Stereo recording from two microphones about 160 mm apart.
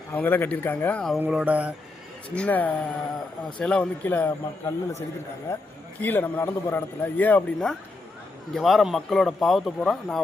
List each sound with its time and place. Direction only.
0.1 s a man's voice: 10° left (ahead or behind)
1.2 s speech: 5° right (ahead or behind)
2.3 s a man's voice: 10° left (ahead or behind)